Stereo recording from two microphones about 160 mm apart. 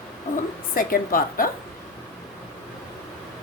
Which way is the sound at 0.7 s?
60° left (ahead or behind).